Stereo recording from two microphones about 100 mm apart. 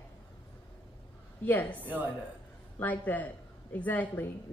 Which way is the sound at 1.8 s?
20° right (ahead or behind).